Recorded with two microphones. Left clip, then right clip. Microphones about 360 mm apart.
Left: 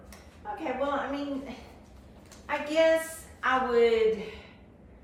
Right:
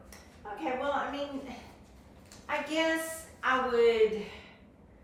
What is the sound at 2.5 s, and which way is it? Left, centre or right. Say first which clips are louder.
A woman's voice: left 6 dB; centre.